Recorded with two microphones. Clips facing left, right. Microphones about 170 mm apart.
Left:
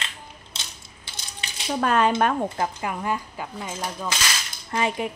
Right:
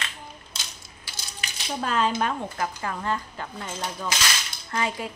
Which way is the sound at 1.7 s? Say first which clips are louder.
Left 4 dB; 60° left (ahead or behind).